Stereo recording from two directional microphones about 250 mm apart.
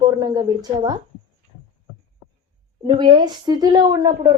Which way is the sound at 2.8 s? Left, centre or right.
Centre.